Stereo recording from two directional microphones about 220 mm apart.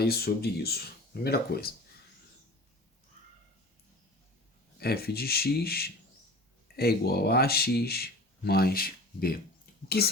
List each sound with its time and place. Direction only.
0.0 s speech: 45° left (ahead or behind)
4.8 s speech: 45° left (ahead or behind)